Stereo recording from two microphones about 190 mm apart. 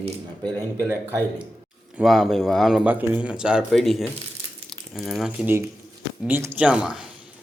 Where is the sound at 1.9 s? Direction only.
Centre (ahead or behind).